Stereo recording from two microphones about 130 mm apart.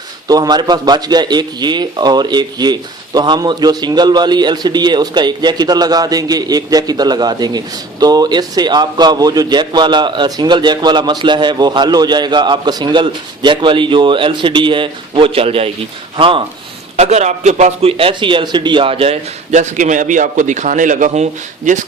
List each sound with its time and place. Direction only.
0.3 s a man's voice: 30° right (ahead or behind)
17.0 s a man's voice: 60° right (ahead or behind); by 21.8 s 75° right (ahead or behind)